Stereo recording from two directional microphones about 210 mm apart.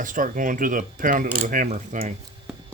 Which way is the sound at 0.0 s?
40° right (ahead or behind).